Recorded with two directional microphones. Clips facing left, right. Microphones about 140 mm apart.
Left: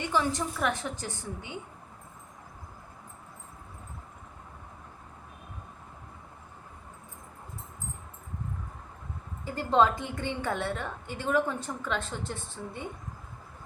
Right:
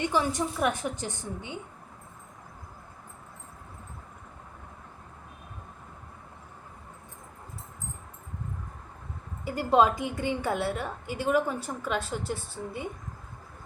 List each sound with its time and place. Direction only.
0.1 s a woman's voice: 15° right (ahead or behind)
9.4 s a woman's voice: 10° right (ahead or behind)